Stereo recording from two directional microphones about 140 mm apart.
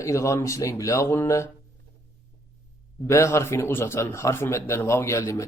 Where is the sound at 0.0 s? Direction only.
20° left (ahead or behind).